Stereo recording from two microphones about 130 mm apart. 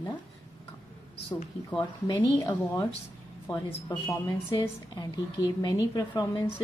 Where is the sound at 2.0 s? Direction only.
35° left (ahead or behind).